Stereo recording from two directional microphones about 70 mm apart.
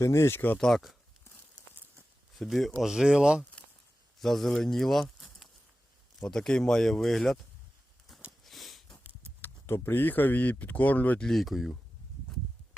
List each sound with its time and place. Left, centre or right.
0.0 s speech: left
0.6 s speech: centre
2.4 s speech: centre
4.2 s speech: centre
8.4 s a sound: centre
9.4 s speech: left
11.2 s speech: centre